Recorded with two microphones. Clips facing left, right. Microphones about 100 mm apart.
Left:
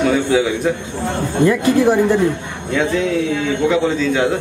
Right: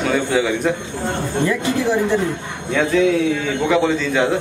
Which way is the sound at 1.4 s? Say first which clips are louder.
Left 7 dB; 50° left (ahead or behind).